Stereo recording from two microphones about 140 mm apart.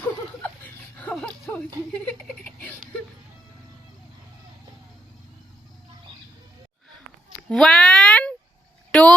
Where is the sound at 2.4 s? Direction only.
10° left (ahead or behind).